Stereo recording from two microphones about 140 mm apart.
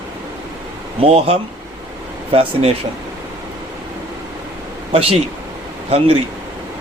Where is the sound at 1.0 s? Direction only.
45° right (ahead or behind).